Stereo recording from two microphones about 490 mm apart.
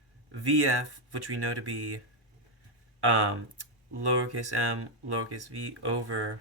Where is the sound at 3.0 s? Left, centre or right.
Right.